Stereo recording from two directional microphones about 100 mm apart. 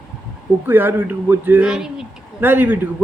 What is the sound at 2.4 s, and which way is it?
Speech, 20° right (ahead or behind).